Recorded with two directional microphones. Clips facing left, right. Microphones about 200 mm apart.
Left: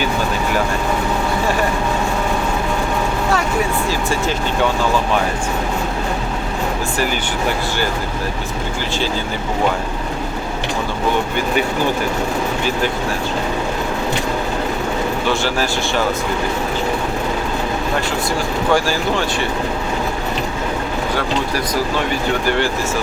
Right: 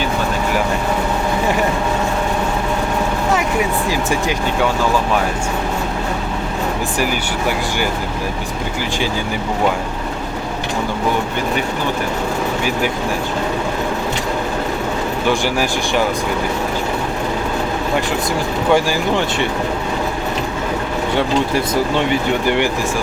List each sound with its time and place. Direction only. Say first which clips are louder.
3.8 s speech: right 1 dB; 15° right (ahead or behind)
15.3 s speech: right 3 dB; 15° right (ahead or behind)
18.7 s speech: right 2 dB; 20° right (ahead or behind)
21.2 s speech: right 6 dB; 25° right (ahead or behind)